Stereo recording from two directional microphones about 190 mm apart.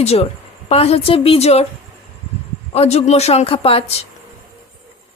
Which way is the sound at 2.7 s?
35° left (ahead or behind).